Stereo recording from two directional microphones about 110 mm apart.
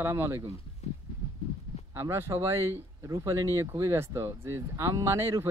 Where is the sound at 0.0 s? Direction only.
20° right (ahead or behind).